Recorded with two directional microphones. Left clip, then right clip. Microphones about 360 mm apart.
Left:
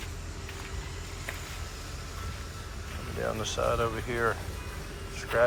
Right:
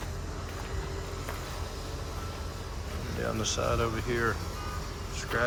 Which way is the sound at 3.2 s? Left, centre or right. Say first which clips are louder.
Left 1 dB; centre.